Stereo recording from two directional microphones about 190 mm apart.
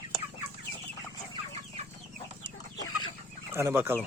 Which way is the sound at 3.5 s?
10° right (ahead or behind).